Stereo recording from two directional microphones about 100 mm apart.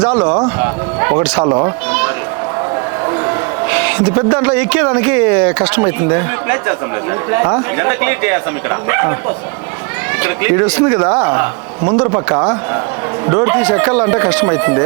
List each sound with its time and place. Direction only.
0.0 s speech: 15° right (ahead or behind)
1.5 s speech: 30° right (ahead or behind)
3.1 s a man's voice: 25° right (ahead or behind)
10.2 s speech: 20° right (ahead or behind)